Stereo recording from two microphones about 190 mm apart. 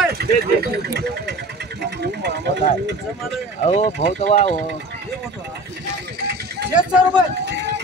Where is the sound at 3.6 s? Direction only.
35° left (ahead or behind).